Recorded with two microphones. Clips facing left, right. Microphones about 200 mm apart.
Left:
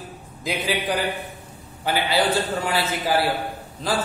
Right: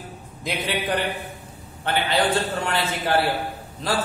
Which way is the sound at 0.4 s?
Centre (ahead or behind).